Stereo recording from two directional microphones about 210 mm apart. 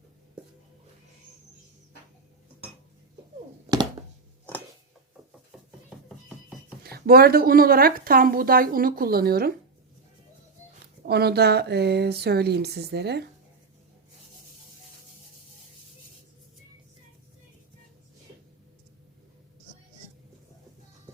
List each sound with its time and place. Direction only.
6.1 s music: centre (ahead or behind)
6.8 s speech: 45° right (ahead or behind)
11.0 s speech: 50° right (ahead or behind)